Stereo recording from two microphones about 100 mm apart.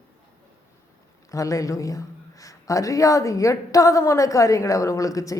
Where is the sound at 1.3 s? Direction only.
35° left (ahead or behind).